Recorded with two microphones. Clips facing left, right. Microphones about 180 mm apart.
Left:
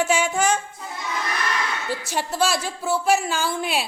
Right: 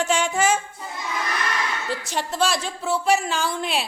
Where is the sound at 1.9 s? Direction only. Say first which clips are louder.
Left 1 dB; 5° left (ahead or behind).